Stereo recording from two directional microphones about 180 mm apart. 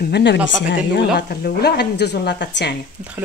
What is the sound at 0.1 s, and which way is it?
Speech, 75° left (ahead or behind).